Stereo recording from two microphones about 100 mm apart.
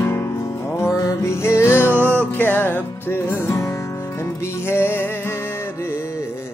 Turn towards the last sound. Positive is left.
turn(degrees=25)  # may be behind; listen again after turning